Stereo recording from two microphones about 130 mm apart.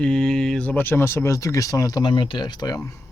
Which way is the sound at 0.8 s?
15° left (ahead or behind).